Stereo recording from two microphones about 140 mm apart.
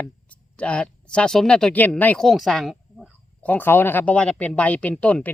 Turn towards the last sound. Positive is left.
turn(degrees=10)  # may be behind; listen again after turning